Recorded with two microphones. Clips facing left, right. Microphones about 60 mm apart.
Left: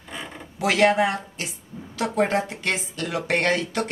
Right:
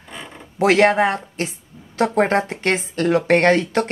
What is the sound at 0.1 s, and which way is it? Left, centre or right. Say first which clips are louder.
Zipper: even; centre.